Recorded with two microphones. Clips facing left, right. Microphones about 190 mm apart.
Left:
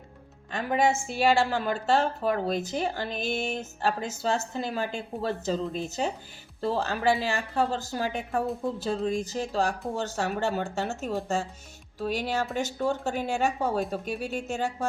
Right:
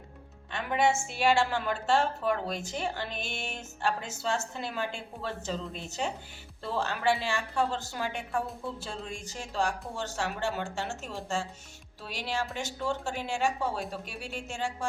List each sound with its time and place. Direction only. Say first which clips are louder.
0.5 s a woman's voice: left 2 dB; 40° left (ahead or behind)